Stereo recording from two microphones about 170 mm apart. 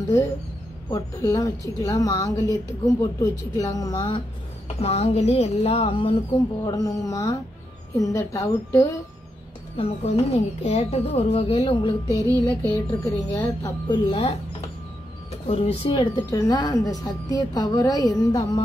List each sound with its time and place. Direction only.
0.8 s a woman's voice: 25° left (ahead or behind)
4.7 s speech: 35° left (ahead or behind)
6.6 s a woman's voice: 20° left (ahead or behind)
9.8 s speech: 35° left (ahead or behind)
12.1 s a woman's voice: 15° left (ahead or behind)
15.4 s speech: 35° left (ahead or behind)
16.3 s a woman's voice: 25° left (ahead or behind)